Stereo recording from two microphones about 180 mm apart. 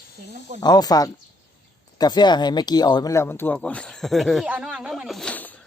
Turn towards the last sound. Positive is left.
turn(degrees=10)  # may be behind; listen again after turning